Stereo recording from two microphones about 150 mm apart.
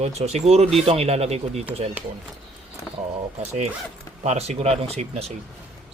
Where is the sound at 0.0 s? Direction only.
45° right (ahead or behind).